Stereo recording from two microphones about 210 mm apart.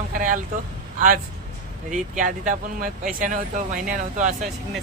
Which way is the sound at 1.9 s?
35° right (ahead or behind).